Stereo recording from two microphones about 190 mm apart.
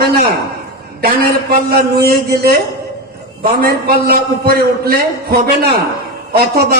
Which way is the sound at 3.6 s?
55° right (ahead or behind).